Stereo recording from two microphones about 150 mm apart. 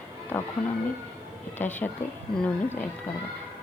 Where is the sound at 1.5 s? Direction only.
15° left (ahead or behind).